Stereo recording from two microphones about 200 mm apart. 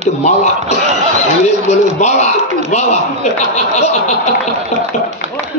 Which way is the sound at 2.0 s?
35° left (ahead or behind).